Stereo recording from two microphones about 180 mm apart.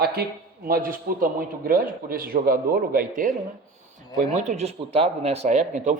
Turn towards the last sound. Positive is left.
turn(degrees=-40)  # may be behind; listen again after turning